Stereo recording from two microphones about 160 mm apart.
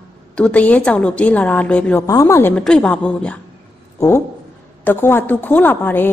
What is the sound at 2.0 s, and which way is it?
Speech, 20° left (ahead or behind).